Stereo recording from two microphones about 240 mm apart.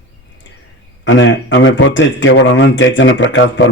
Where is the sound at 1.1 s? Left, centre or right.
Left.